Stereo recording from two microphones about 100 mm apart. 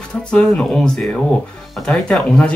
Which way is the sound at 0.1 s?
10° left (ahead or behind).